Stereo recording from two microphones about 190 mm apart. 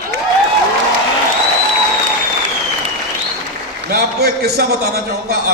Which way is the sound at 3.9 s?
55° right (ahead or behind).